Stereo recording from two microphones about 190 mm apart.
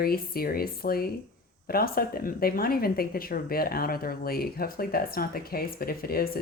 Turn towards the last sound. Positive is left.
turn(degrees=50)  # may be behind; listen again after turning